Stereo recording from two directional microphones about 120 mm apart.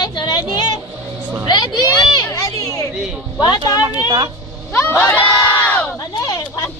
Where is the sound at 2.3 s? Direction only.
30° left (ahead or behind).